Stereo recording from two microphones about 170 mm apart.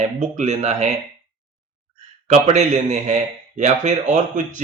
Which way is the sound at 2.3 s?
45° right (ahead or behind).